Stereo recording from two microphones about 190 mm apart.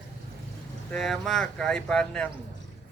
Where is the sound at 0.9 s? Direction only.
Centre (ahead or behind).